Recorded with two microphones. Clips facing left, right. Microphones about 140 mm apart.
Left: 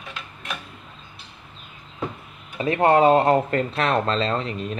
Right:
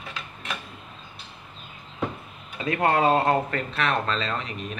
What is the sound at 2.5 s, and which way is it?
Speech, 25° left (ahead or behind).